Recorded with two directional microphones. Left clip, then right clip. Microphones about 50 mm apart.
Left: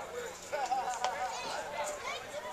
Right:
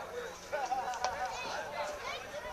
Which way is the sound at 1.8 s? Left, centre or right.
Centre.